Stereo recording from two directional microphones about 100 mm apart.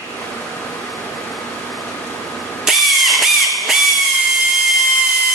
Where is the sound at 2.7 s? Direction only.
Centre (ahead or behind).